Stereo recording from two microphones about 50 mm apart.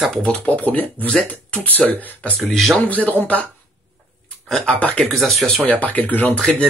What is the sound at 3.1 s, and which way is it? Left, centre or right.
Speech, left.